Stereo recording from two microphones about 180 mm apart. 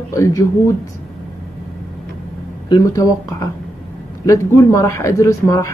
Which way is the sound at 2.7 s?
20° left (ahead or behind).